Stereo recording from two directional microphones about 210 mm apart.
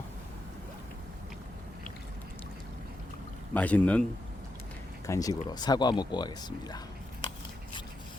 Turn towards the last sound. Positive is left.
turn(degrees=20)  # may be behind; listen again after turning